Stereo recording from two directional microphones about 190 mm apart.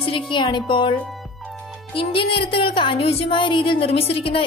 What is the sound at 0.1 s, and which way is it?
Speech, 25° left (ahead or behind).